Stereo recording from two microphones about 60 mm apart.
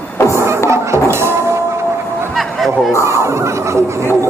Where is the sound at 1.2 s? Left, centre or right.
Right.